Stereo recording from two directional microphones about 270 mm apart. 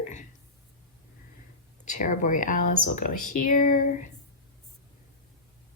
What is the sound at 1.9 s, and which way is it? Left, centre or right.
Speech, left.